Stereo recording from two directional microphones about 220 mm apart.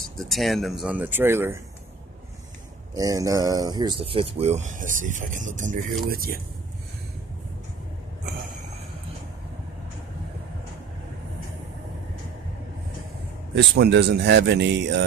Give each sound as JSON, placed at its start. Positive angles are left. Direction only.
{"t": 0.3, "sound": "speech", "side_deg": 0}
{"t": 2.9, "sound": "speech", "side_deg": -15}
{"t": 13.6, "sound": "speech", "side_deg": -50}